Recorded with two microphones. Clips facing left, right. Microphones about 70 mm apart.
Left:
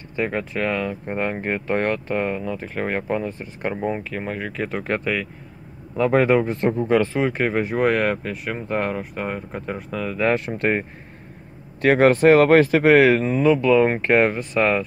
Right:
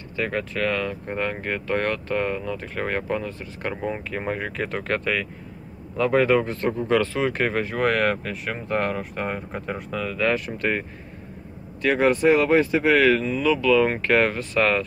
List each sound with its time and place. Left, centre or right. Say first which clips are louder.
0.1 s speech: left 2 dB; centre
3.7 s speech: left 4 dB; centre
4.1 s speech: even; centre
5.9 s speech: left 2 dB; left
10.1 s speech: left 3 dB; left
11.8 s speech: left 4 dB; left
12.8 s speech: left 4 dB; left; by 14.8 s centre